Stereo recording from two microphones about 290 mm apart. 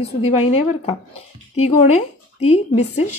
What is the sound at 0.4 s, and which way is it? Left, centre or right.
Speech, centre.